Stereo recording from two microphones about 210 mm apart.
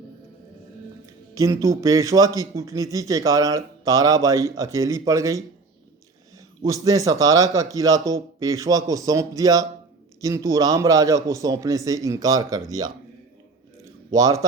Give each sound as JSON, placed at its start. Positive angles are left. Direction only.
{"t": 1.6, "sound": "a man's voice", "side_deg": -15}
{"t": 6.7, "sound": "a man's voice", "side_deg": -15}
{"t": 14.1, "sound": "a man's voice", "side_deg": -15}